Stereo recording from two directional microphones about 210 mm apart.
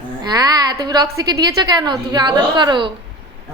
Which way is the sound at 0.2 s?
20° right (ahead or behind).